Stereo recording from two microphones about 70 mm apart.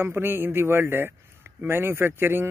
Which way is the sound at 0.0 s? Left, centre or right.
Right.